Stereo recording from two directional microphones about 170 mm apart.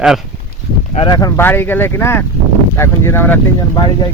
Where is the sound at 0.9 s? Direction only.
25° left (ahead or behind).